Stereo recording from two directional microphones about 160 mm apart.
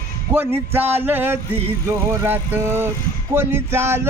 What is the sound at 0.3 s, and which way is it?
Speech, 15° right (ahead or behind).